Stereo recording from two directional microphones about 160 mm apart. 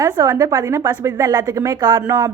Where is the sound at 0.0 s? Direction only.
25° right (ahead or behind).